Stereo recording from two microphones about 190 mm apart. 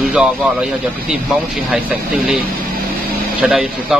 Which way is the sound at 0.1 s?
5° right (ahead or behind).